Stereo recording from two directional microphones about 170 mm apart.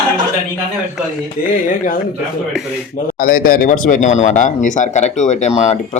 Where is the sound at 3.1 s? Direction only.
55° left (ahead or behind).